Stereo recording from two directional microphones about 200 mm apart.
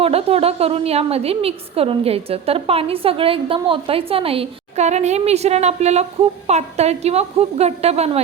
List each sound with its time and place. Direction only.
0.0 s a woman's voice: 30° right (ahead or behind)